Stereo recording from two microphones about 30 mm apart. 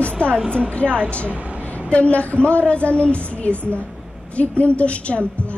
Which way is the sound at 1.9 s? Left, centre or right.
Left.